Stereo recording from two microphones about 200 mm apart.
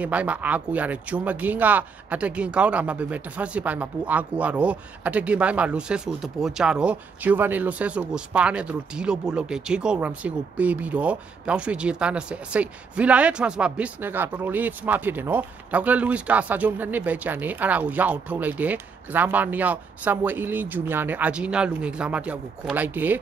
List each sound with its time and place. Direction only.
0.0 s speech: 5° right (ahead or behind)